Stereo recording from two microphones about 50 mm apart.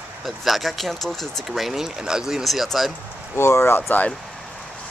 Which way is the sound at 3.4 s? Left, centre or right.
Left.